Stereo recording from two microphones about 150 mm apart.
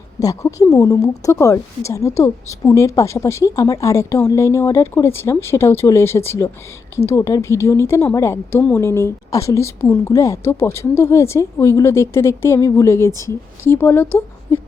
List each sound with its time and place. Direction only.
0.2 s a woman's voice: 20° left (ahead or behind)